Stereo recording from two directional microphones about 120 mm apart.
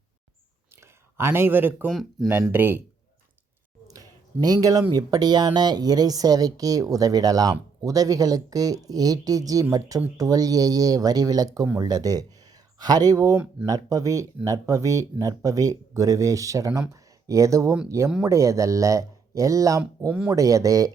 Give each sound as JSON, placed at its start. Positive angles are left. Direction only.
{"t": 0.8, "sound": "speech", "side_deg": -20}
{"t": 1.9, "sound": "speech", "side_deg": 0}
{"t": 2.5, "sound": "speech", "side_deg": -15}
{"t": 3.8, "sound": "a sound", "side_deg": -30}
{"t": 4.9, "sound": "a woman's voice", "side_deg": -35}
{"t": 20.1, "sound": "speech", "side_deg": -10}
{"t": 20.3, "sound": "speech", "side_deg": -30}